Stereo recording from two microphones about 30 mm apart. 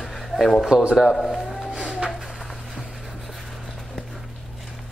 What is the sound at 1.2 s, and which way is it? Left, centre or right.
Speech, centre.